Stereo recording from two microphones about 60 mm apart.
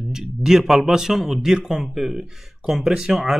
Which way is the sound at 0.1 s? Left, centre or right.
Centre.